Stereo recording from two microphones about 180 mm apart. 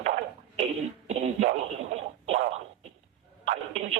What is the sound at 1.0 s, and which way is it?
Speech, 35° right (ahead or behind).